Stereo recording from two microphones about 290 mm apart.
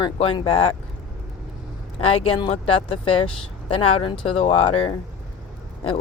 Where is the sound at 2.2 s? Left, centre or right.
Centre.